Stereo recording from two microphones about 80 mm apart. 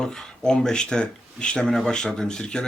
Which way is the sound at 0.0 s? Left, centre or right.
Centre.